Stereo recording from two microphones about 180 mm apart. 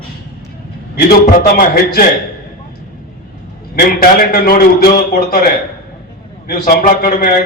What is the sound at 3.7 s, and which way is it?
A man's voice, 55° left (ahead or behind).